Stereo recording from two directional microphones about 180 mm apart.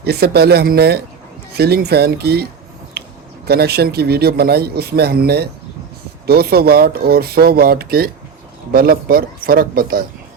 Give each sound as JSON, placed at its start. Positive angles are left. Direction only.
{"t": 0.0, "sound": "a man's voice", "side_deg": -60}
{"t": 3.0, "sound": "a sound", "side_deg": -65}
{"t": 3.4, "sound": "a man's voice", "side_deg": -60}